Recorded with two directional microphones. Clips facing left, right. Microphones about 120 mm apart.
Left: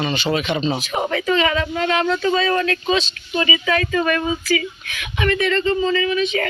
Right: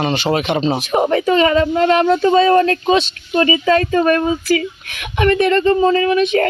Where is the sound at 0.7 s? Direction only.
45° right (ahead or behind).